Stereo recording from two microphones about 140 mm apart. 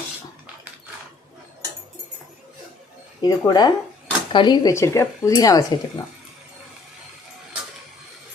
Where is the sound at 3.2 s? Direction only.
25° left (ahead or behind).